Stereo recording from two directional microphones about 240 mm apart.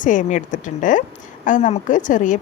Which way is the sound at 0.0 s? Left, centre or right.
Left.